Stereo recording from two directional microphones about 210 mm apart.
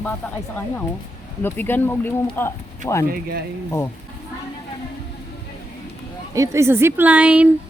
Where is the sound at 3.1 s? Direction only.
45° right (ahead or behind).